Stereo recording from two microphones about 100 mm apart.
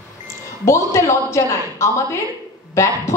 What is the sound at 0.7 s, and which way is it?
Speech, 30° left (ahead or behind).